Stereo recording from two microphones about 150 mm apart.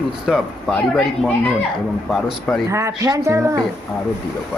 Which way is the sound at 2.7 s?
20° right (ahead or behind).